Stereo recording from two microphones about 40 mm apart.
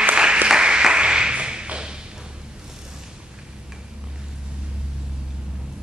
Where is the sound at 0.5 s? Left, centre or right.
Right.